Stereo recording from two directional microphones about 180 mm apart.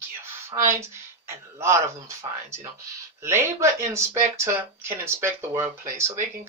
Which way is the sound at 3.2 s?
15° right (ahead or behind).